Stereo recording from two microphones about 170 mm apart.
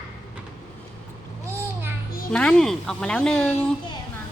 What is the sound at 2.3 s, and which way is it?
Speech, 5° left (ahead or behind).